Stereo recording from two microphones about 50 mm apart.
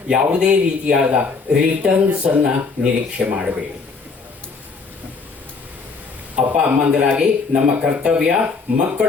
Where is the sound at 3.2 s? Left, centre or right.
Right.